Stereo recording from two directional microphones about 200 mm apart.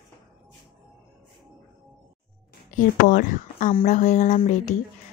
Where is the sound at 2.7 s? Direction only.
40° left (ahead or behind).